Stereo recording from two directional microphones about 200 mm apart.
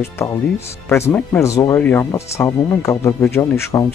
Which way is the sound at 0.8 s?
10° left (ahead or behind).